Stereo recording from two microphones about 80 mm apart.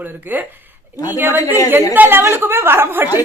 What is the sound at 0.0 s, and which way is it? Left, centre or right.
A woman's voice, right.